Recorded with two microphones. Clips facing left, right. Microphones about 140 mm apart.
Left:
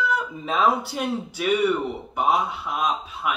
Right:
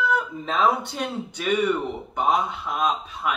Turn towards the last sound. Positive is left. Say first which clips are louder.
# right 1 dB
turn(degrees=5)  # may be behind; listen again after turning